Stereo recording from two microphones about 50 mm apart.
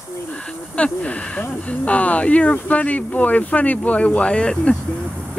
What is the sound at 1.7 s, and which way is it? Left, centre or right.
Speech, left.